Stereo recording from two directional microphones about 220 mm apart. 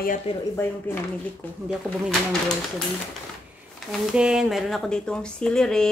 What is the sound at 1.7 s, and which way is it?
Speech, centre (ahead or behind).